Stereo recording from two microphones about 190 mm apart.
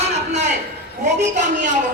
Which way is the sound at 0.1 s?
40° right (ahead or behind).